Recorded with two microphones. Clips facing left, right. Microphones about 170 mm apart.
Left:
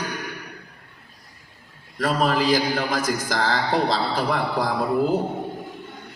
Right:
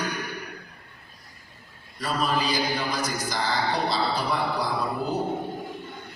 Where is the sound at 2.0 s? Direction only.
90° left.